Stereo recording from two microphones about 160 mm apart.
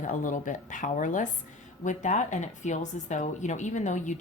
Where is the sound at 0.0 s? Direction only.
55° left (ahead or behind).